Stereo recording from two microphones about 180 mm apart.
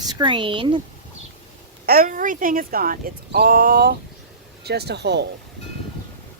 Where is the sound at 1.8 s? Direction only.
55° right (ahead or behind).